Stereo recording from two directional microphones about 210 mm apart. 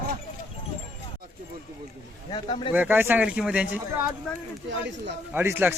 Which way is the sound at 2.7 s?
10° right (ahead or behind).